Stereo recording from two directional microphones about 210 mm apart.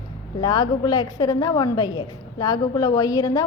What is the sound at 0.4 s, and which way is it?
A woman's voice, 20° left (ahead or behind).